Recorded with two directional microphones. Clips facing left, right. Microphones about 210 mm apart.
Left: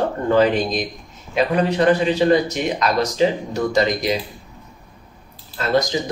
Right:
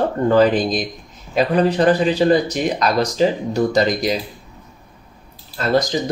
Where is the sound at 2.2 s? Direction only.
35° right (ahead or behind).